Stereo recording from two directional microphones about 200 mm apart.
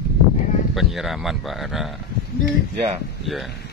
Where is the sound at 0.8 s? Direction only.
Centre (ahead or behind).